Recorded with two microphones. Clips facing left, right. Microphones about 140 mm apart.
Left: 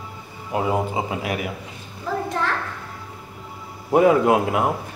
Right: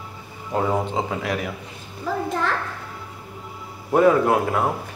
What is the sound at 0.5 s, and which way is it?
Speech, 10° left (ahead or behind).